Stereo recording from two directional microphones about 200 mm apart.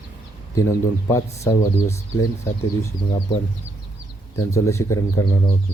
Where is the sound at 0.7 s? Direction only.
15° left (ahead or behind).